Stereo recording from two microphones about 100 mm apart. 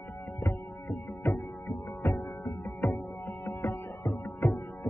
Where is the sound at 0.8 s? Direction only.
20° left (ahead or behind).